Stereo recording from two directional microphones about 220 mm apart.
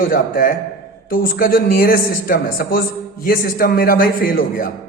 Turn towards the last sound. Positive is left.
turn(degrees=40)  # may be behind; listen again after turning